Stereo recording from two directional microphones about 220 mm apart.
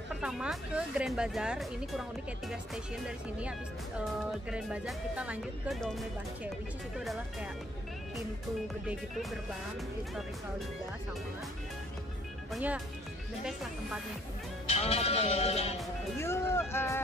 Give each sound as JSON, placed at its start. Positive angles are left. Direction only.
{"t": 0.2, "sound": "speech", "side_deg": 0}
{"t": 8.8, "sound": "speech", "side_deg": 0}
{"t": 12.4, "sound": "speech", "side_deg": -5}
{"t": 14.7, "sound": "music", "side_deg": 30}
{"t": 16.2, "sound": "speech", "side_deg": 10}